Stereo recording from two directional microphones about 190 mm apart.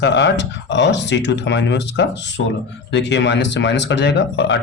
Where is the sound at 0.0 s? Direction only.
65° left (ahead or behind).